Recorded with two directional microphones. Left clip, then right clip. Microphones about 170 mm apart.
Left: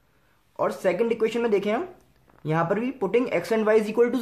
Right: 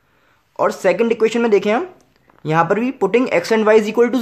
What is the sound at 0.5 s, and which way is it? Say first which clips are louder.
Speech: right 8 dB; 40° right (ahead or behind).